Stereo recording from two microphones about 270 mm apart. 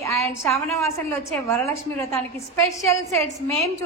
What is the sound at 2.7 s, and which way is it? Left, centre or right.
Speech, centre.